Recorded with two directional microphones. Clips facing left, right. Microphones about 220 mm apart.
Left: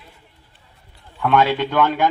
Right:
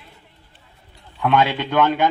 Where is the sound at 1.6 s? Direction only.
20° right (ahead or behind).